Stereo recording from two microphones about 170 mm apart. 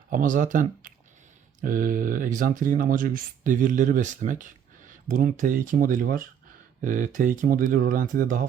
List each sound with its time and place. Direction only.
0.1 s speech: 50° right (ahead or behind)